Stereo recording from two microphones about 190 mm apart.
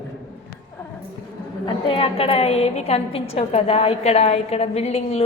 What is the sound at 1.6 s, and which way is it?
A woman's voice, 30° left (ahead or behind).